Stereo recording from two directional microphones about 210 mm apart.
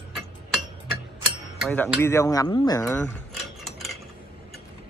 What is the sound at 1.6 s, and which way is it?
Speech, centre (ahead or behind).